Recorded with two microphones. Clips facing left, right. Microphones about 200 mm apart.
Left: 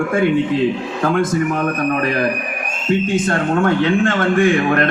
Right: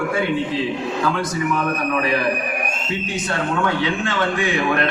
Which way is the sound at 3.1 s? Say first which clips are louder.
Left 6 dB; 50° left (ahead or behind).